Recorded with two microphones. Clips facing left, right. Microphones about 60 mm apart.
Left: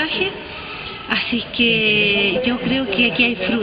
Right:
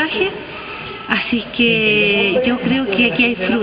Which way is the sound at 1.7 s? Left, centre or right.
Centre.